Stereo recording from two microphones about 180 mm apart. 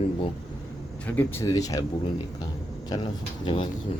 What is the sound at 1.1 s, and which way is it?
Speech, 15° left (ahead or behind).